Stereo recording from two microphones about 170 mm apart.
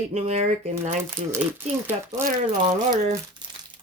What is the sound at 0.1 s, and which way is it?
Speech, 40° right (ahead or behind).